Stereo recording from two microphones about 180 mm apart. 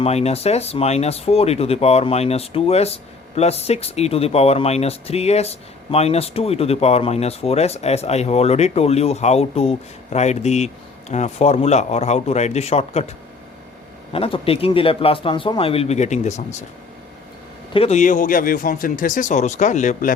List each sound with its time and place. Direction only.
0.0 s speech: 35° left (ahead or behind)
14.1 s speech: 30° left (ahead or behind)
17.7 s speech: 40° left (ahead or behind)